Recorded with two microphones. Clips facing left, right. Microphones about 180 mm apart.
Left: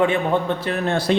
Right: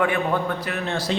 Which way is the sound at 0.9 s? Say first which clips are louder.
Left 6 dB; 55° left (ahead or behind).